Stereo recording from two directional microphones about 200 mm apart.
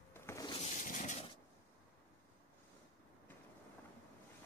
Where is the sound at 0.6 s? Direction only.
40° left (ahead or behind).